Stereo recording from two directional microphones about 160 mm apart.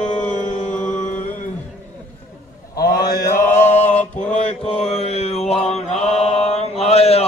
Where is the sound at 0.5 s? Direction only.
50° left (ahead or behind).